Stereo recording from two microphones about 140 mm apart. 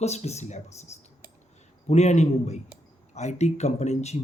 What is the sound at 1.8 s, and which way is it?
Speech, 50° left (ahead or behind).